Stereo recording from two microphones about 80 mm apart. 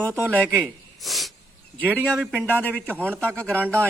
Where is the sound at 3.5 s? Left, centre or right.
Centre.